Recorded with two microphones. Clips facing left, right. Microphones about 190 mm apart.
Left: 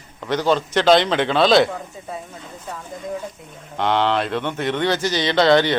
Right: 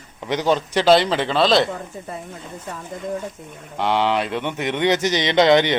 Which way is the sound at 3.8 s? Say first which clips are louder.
Left 1 dB; 10° right (ahead or behind).